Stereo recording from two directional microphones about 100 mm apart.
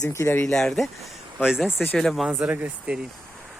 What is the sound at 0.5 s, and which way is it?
Speech, 5° left (ahead or behind).